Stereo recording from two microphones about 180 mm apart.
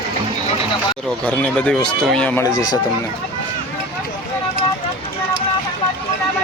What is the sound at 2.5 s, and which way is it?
Speech, 20° left (ahead or behind).